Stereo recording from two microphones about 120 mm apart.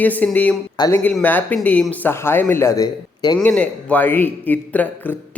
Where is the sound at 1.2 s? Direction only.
15° left (ahead or behind); by 3.4 s 35° left (ahead or behind).